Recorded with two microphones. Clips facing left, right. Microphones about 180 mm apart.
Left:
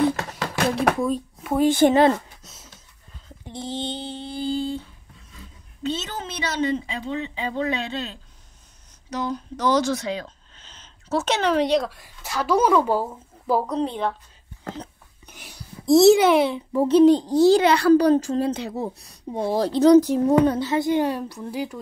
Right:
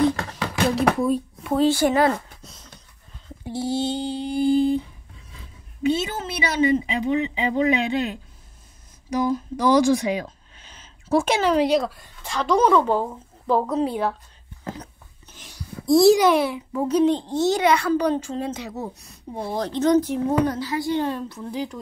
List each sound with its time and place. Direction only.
0.7 s speech: centre (ahead or behind)
1.5 s a woman's voice: 10° left (ahead or behind)
1.8 s a child's voice: 25° left (ahead or behind)
2.4 s a sound: 5° left (ahead or behind)
3.4 s a sound: 10° right (ahead or behind)
5.8 s speech: 10° right (ahead or behind)
15.8 s a child's voice: 25° left (ahead or behind)
17.1 s a child's voice: 35° left (ahead or behind)
20.6 s a woman's voice: 20° left (ahead or behind)